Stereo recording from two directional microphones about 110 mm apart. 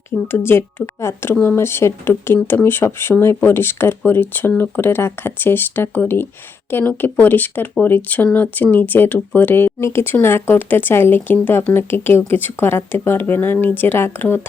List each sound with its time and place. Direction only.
0.3 s speech: 20° left (ahead or behind)